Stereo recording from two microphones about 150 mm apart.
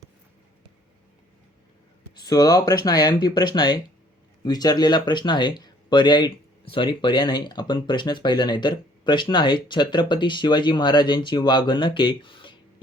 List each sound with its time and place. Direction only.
2.2 s speech: 25° left (ahead or behind)